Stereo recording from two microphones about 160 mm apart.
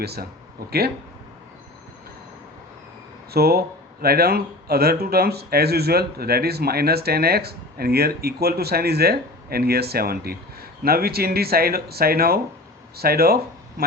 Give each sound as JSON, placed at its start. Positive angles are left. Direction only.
{"t": 0.0, "sound": "speech", "side_deg": -85}
{"t": 3.3, "sound": "speech", "side_deg": -75}